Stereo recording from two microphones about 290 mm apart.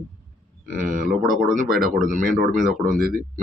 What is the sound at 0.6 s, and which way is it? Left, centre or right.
Speech, right.